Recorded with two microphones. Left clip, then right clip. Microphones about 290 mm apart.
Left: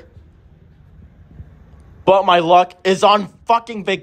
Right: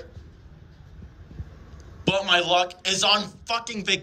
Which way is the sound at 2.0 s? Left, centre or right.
Centre.